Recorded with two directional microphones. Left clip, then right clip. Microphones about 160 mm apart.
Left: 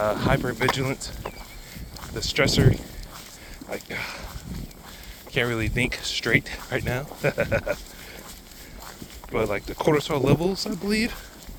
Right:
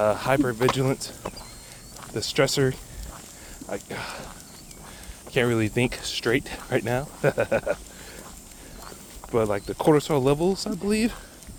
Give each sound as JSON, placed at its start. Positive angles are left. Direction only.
{"t": 0.0, "sound": "speech", "side_deg": -55}
{"t": 2.1, "sound": "speech", "side_deg": -55}
{"t": 5.3, "sound": "speech", "side_deg": -55}
{"t": 9.3, "sound": "speech", "side_deg": -45}